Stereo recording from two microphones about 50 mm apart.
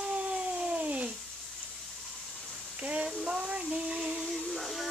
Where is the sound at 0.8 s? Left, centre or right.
Right.